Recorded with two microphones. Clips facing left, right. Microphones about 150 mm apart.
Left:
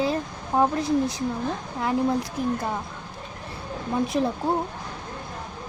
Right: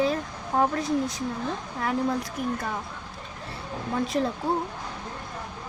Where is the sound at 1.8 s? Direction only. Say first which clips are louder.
Left 3 dB; 20° left (ahead or behind).